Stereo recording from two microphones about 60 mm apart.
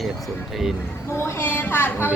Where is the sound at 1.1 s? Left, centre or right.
Left.